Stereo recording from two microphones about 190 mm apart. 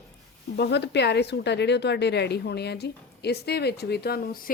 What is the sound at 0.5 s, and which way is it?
A woman's voice, 60° left (ahead or behind).